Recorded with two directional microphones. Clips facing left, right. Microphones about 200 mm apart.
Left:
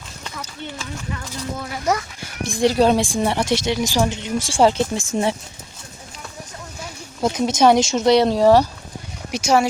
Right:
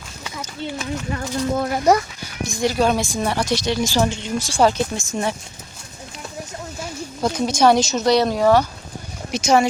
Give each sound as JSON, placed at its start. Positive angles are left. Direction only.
{"t": 0.3, "sound": "speech", "side_deg": -15}
{"t": 1.1, "sound": "speech", "side_deg": -50}
{"t": 2.4, "sound": "speech", "side_deg": 30}
{"t": 7.2, "sound": "speech", "side_deg": 20}
{"t": 9.3, "sound": "speech", "side_deg": 10}